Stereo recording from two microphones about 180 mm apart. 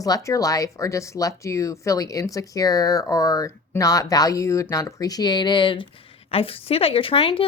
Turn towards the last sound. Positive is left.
turn(degrees=30)  # may be behind; listen again after turning